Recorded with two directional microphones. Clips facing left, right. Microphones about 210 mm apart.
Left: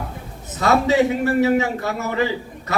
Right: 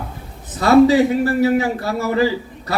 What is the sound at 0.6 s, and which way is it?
A man's voice, 35° right (ahead or behind).